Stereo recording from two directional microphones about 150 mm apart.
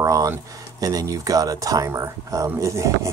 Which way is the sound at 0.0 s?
20° right (ahead or behind).